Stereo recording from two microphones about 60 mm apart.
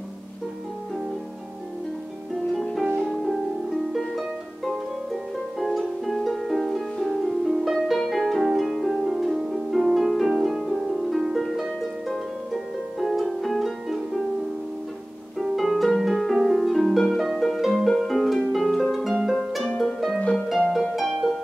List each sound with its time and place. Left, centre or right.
2.6 s harp: centre
4.1 s music: centre
5.6 s harp: centre
15.3 s harp: centre
20.2 s music: centre
20.7 s harp: centre